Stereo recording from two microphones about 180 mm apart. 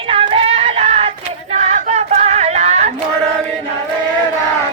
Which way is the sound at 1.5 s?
40° right (ahead or behind).